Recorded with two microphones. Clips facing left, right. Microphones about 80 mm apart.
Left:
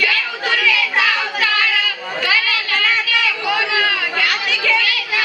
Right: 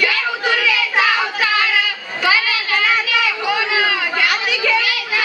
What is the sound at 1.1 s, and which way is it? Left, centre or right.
Child singing, centre.